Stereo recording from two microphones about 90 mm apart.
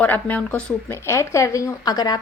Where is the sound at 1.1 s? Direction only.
35° left (ahead or behind).